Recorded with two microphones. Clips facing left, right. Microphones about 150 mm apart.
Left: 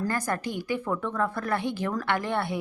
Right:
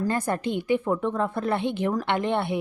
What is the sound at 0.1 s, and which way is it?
A woman's voice, 20° right (ahead or behind).